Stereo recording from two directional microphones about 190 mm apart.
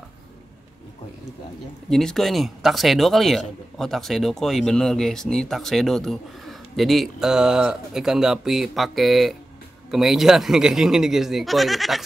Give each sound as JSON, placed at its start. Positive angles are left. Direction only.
{"t": 1.9, "sound": "speech", "side_deg": 0}